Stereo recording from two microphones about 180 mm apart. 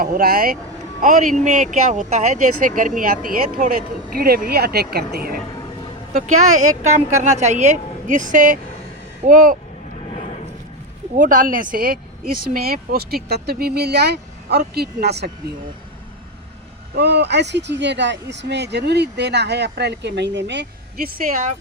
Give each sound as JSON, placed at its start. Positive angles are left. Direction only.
{"t": 0.0, "sound": "speech", "side_deg": -55}
{"t": 6.1, "sound": "speech", "side_deg": -40}
{"t": 11.2, "sound": "speech", "side_deg": -50}
{"t": 16.9, "sound": "speech", "side_deg": -65}